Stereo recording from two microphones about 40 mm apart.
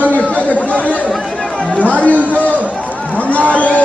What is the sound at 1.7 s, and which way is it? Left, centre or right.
Chatter, left.